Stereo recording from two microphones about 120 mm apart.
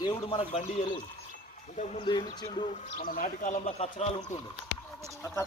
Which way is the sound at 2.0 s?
35° left (ahead or behind).